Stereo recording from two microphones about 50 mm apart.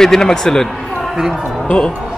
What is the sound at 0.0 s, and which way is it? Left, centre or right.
Speech, centre.